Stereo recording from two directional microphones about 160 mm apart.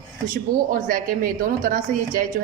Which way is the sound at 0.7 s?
60° right (ahead or behind).